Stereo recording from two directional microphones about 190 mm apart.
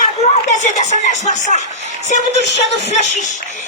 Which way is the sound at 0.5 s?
35° left (ahead or behind).